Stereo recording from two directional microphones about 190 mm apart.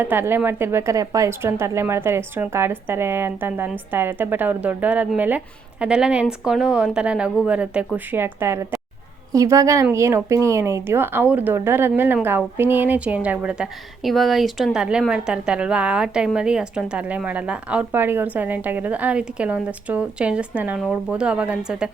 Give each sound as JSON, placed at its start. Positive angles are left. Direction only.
{"t": 0.0, "sound": "a woman's voice", "side_deg": -10}